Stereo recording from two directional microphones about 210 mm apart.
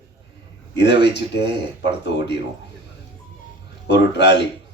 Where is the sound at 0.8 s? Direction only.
55° left (ahead or behind).